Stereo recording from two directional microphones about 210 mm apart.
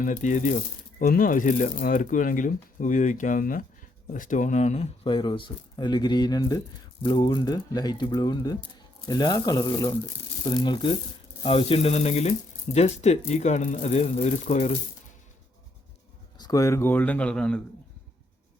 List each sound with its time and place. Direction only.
0.0 s speech: 35° left (ahead or behind)
16.4 s speech: 15° left (ahead or behind)